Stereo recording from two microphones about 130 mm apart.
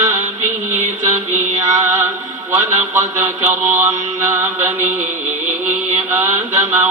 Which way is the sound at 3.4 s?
15° right (ahead or behind).